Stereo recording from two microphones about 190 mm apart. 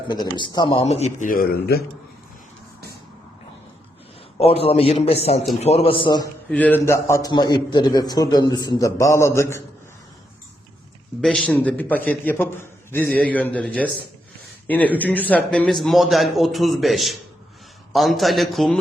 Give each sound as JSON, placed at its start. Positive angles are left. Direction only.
{"t": 0.1, "sound": "speech", "side_deg": 25}
{"t": 4.4, "sound": "a man's voice", "side_deg": 30}
{"t": 6.5, "sound": "a man's voice", "side_deg": 10}
{"t": 11.2, "sound": "a man's voice", "side_deg": 5}